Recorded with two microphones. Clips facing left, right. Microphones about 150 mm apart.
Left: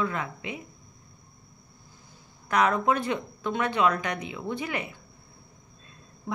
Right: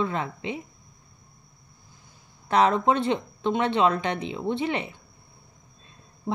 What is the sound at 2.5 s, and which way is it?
Speech, 30° right (ahead or behind).